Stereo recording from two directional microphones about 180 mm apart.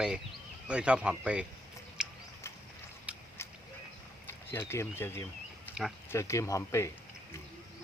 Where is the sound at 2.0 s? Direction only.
5° right (ahead or behind).